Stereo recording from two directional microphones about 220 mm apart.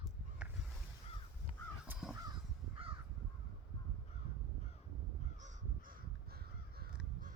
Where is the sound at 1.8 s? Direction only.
5° right (ahead or behind).